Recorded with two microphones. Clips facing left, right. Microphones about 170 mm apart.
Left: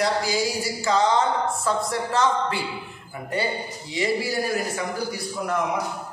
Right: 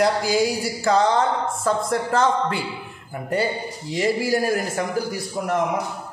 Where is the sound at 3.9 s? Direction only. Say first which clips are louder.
Right 4 dB; 45° right (ahead or behind).